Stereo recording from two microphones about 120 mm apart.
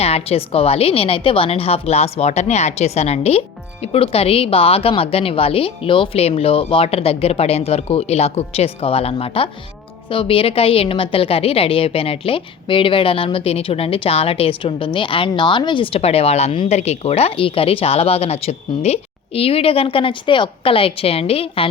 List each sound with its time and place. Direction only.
0.0 s a woman's voice: 55° left (ahead or behind)